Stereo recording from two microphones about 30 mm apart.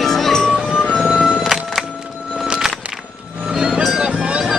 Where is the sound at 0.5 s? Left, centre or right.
Centre.